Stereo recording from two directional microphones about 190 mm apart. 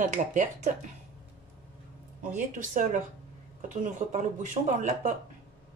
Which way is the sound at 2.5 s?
45° right (ahead or behind).